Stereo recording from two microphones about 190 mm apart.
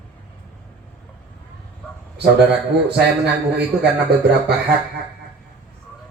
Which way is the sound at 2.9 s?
60° right (ahead or behind).